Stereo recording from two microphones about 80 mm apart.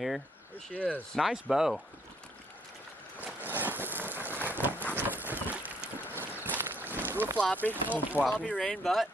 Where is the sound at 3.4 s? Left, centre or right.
Right.